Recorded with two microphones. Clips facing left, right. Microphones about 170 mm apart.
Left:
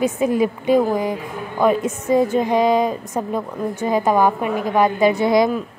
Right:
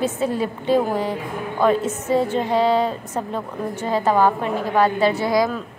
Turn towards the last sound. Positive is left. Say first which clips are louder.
# left 3 dB
turn(degrees=20)  # may be behind; listen again after turning